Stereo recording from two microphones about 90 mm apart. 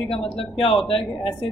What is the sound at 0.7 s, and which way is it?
Speech, 5° left (ahead or behind).